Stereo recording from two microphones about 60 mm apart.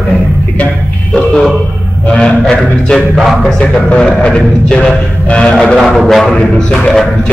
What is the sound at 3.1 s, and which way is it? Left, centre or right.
Music, centre.